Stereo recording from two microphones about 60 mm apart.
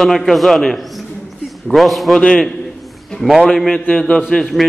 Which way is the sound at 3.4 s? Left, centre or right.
Centre.